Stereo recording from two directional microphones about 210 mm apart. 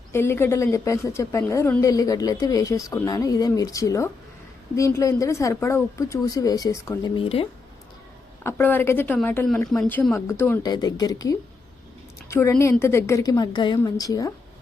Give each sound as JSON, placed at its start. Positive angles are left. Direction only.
{"t": 0.1, "sound": "a woman's voice", "side_deg": 10}
{"t": 8.4, "sound": "a woman's voice", "side_deg": 10}